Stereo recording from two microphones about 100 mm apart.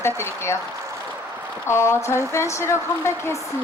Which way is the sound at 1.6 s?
25° left (ahead or behind).